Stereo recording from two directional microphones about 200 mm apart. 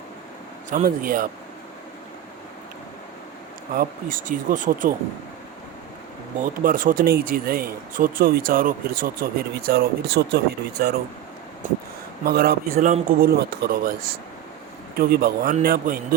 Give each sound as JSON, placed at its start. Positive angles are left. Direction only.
{"t": 0.7, "sound": "speech", "side_deg": -45}
{"t": 3.8, "sound": "speech", "side_deg": -45}
{"t": 6.4, "sound": "speech", "side_deg": -45}
{"t": 12.2, "sound": "speech", "side_deg": -50}
{"t": 14.9, "sound": "speech", "side_deg": -50}